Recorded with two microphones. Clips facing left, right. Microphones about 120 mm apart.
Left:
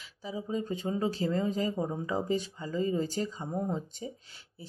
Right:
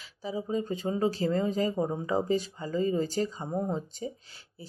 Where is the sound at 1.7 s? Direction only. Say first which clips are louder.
Right 3 dB; 25° right (ahead or behind).